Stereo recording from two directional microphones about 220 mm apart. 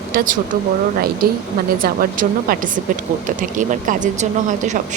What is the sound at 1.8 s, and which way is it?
A woman's voice, 40° right (ahead or behind).